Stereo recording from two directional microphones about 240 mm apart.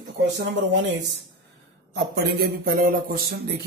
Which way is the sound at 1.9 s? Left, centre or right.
Right.